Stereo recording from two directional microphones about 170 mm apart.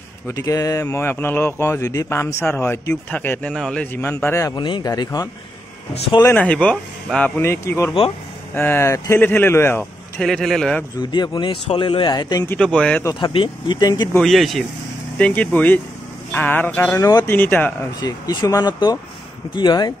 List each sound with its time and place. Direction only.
0.3 s speech: 20° left (ahead or behind)
6.2 s speech: 10° left (ahead or behind)
11.0 s speech: 25° left (ahead or behind)
12.4 s speech: 5° left (ahead or behind)
13.0 s speech: 30° left (ahead or behind)
14.1 s speech: centre (ahead or behind)
18.0 s speech: 20° left (ahead or behind)